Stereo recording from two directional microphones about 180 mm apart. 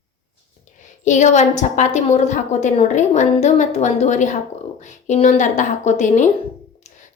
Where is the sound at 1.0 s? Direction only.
40° left (ahead or behind).